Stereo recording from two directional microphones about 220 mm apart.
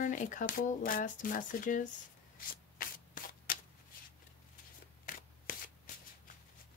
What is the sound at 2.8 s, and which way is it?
Shuffling cards, 40° left (ahead or behind).